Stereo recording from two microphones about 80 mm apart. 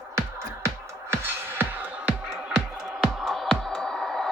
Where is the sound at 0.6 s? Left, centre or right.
Right.